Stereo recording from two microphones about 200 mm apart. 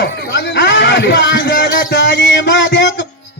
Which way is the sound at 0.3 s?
60° left (ahead or behind).